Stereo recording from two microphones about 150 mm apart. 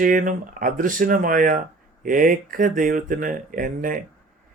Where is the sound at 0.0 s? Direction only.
60° right (ahead or behind).